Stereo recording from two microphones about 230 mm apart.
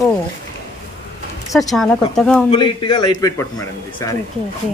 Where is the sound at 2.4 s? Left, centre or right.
Left.